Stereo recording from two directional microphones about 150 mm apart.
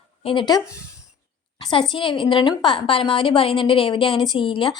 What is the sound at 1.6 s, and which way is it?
A woman's voice, 35° left (ahead or behind).